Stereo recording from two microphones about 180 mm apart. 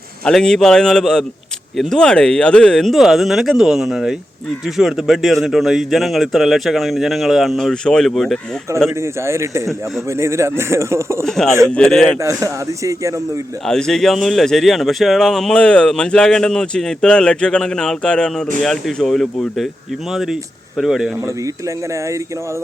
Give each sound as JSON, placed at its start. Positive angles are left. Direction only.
{"t": 0.3, "sound": "speech", "side_deg": 5}
{"t": 8.9, "sound": "speech", "side_deg": -15}
{"t": 11.3, "sound": "speech", "side_deg": 0}
{"t": 12.2, "sound": "speech", "side_deg": -15}
{"t": 13.7, "sound": "speech", "side_deg": 5}
{"t": 21.9, "sound": "speech", "side_deg": -15}